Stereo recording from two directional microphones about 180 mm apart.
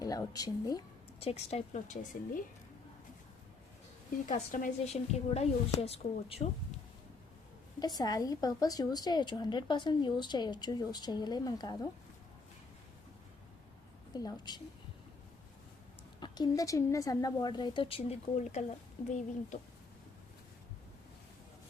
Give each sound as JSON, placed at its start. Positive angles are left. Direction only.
{"t": 0.0, "sound": "a woman's voice", "side_deg": 20}
{"t": 1.2, "sound": "a woman's voice", "side_deg": 35}
{"t": 4.3, "sound": "a woman's voice", "side_deg": 45}
{"t": 7.8, "sound": "a woman's voice", "side_deg": 20}
{"t": 14.1, "sound": "a woman's voice", "side_deg": 20}
{"t": 16.2, "sound": "a woman's voice", "side_deg": 25}